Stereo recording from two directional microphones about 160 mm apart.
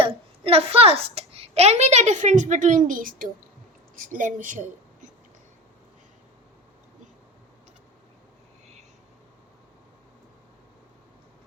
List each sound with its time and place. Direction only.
0.0 s a child's voice: 35° right (ahead or behind); by 4.7 s 55° right (ahead or behind)